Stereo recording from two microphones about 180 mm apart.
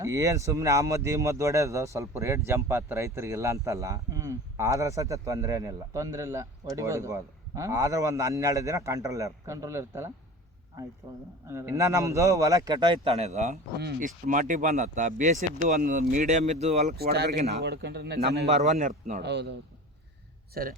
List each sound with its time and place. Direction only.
0.0 s speech: 15° right (ahead or behind); by 16.9 s 40° right (ahead or behind)
17.0 s speech: 65° right (ahead or behind)
17.3 s a man's voice: 40° right (ahead or behind)
17.6 s speech: 65° right (ahead or behind)
18.4 s a man's voice: 40° right (ahead or behind)
19.2 s speech: 70° right (ahead or behind)
20.5 s speech: 55° right (ahead or behind)